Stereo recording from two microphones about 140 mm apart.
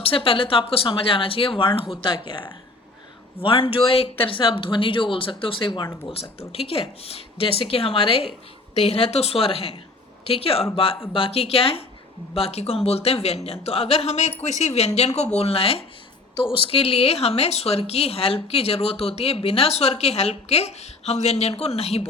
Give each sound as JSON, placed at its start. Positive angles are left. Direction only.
{"t": 0.0, "sound": "speech", "side_deg": 40}